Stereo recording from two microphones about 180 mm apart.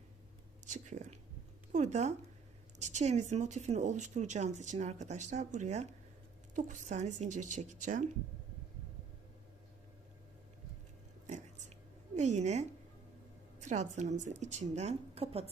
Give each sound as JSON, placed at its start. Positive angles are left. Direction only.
{"t": 0.6, "sound": "a woman's voice", "side_deg": -45}
{"t": 12.1, "sound": "speech", "side_deg": -40}